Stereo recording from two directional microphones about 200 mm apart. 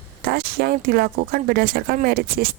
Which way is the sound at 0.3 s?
50° right (ahead or behind).